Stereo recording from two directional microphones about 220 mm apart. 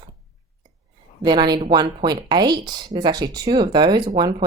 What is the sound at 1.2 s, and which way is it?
Speech, 20° right (ahead or behind).